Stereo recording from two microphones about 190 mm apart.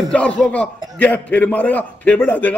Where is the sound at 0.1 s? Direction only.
5° left (ahead or behind).